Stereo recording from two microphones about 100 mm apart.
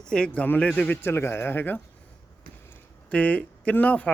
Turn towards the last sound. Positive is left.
turn(degrees=15)  # may be behind; listen again after turning